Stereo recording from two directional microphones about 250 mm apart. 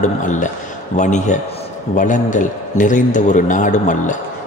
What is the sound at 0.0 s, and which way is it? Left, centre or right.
A man's voice, left.